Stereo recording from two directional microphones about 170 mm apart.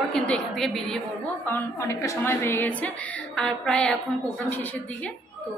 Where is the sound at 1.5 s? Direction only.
15° left (ahead or behind).